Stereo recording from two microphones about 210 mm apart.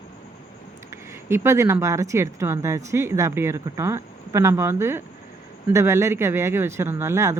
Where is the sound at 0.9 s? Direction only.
10° right (ahead or behind).